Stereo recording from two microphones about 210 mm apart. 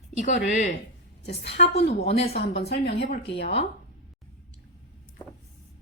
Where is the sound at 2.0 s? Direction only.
30° left (ahead or behind).